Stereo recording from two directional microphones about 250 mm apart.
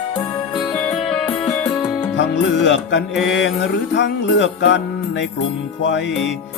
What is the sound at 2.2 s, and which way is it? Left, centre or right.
Music, left.